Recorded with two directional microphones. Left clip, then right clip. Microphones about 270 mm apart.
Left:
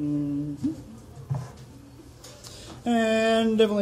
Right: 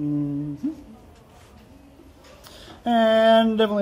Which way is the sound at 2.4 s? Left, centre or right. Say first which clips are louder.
Right 4 dB; right.